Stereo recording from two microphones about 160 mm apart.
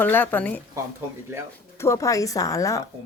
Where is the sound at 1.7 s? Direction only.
20° left (ahead or behind).